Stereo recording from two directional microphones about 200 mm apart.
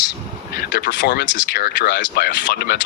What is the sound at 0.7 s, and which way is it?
Speech, 60° left (ahead or behind).